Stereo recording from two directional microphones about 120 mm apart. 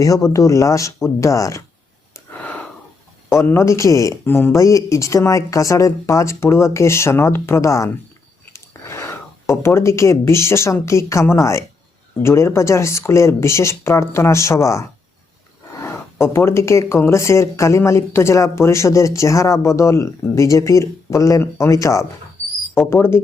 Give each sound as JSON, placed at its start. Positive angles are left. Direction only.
{"t": 0.0, "sound": "speech", "side_deg": 30}
{"t": 2.3, "sound": "a sound", "side_deg": 10}
{"t": 3.2, "sound": "speech", "side_deg": 20}